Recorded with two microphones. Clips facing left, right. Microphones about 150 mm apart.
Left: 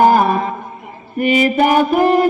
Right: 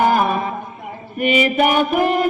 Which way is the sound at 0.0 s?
35° left (ahead or behind).